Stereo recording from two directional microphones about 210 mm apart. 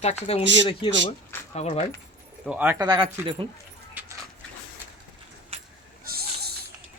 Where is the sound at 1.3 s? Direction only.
10° left (ahead or behind).